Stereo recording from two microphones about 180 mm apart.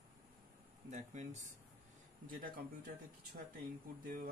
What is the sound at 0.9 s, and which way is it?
Speech, 40° right (ahead or behind).